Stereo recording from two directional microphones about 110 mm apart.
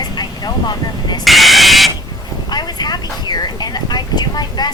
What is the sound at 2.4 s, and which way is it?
Speech, 40° left (ahead or behind).